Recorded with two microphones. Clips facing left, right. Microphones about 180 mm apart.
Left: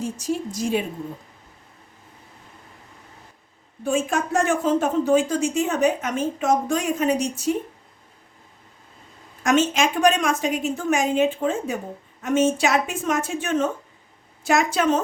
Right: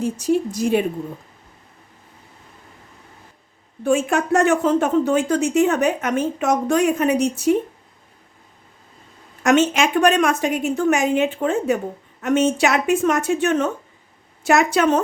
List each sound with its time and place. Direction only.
0.0 s speech: 60° right (ahead or behind)
3.8 s speech: 65° right (ahead or behind)
9.4 s speech: 65° right (ahead or behind)